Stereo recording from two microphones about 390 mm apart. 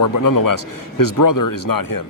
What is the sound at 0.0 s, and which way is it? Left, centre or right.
Speech, left.